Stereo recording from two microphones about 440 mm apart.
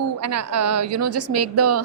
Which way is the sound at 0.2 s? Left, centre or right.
Right.